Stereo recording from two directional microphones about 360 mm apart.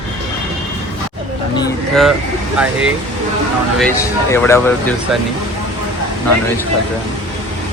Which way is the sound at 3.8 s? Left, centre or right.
Centre.